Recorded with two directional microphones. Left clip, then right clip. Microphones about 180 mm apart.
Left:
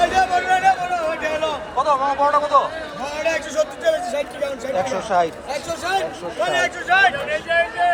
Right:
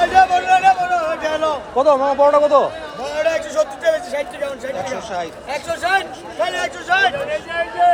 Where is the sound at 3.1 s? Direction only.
55° right (ahead or behind).